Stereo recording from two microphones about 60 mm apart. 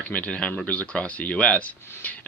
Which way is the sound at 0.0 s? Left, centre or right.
Left.